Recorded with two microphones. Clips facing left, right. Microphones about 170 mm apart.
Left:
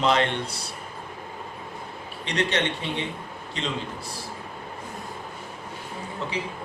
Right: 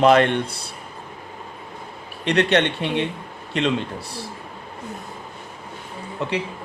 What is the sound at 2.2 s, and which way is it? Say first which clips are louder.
A man's voice: right 7 dB; 60° right (ahead or behind).